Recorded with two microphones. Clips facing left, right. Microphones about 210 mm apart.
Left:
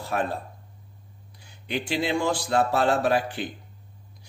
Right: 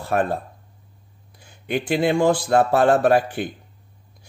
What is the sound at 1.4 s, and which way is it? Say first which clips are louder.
Speech: right 6 dB; 50° right (ahead or behind).